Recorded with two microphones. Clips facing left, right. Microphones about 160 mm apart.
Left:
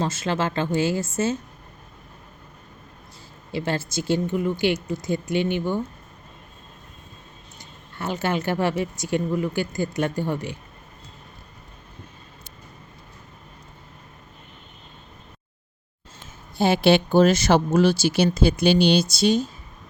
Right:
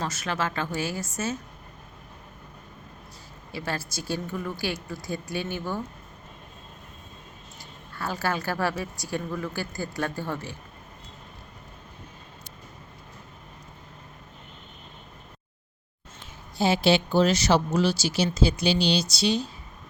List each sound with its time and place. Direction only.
0.0 s speech: 30° left (ahead or behind)
3.5 s speech: 25° left (ahead or behind)
7.6 s speech: 20° left (ahead or behind)
16.6 s speech: 55° left (ahead or behind)